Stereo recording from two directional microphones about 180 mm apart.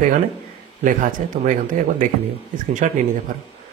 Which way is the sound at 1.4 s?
45° right (ahead or behind).